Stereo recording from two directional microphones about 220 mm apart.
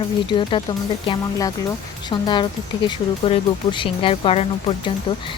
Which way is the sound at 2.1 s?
20° left (ahead or behind).